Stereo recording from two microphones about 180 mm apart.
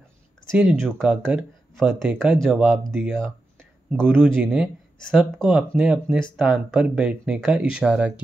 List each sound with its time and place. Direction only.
0.5 s speech: 10° right (ahead or behind)
0.7 s speech: centre (ahead or behind)
4.1 s speech: 5° left (ahead or behind)